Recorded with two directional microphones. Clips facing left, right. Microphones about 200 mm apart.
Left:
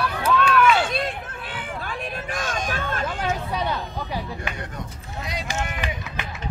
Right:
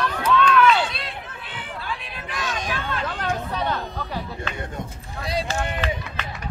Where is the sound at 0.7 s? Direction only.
50° left (ahead or behind).